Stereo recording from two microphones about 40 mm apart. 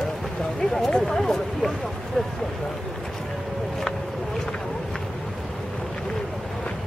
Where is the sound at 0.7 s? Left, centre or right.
Centre.